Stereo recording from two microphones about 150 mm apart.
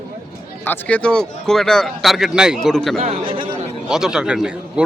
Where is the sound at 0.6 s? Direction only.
10° left (ahead or behind).